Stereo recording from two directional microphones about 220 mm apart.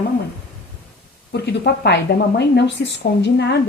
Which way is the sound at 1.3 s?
50° left (ahead or behind).